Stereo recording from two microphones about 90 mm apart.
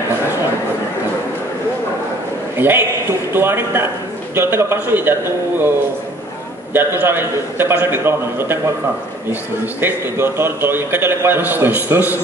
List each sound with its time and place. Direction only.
2.5 s a man's voice: 25° right (ahead or behind)
6.7 s a man's voice: 25° right (ahead or behind)